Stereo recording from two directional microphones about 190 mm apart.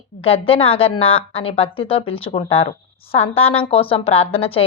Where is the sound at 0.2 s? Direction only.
30° left (ahead or behind).